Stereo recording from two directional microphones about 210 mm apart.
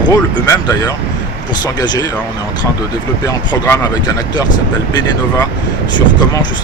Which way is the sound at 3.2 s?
15° left (ahead or behind).